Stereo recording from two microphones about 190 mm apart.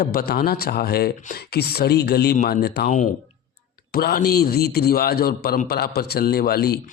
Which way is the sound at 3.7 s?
55° left (ahead or behind).